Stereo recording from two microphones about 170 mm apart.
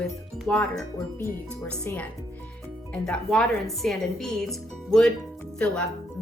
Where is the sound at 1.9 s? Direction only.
15° left (ahead or behind).